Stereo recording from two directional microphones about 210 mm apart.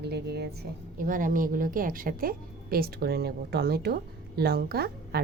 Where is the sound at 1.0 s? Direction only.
40° right (ahead or behind).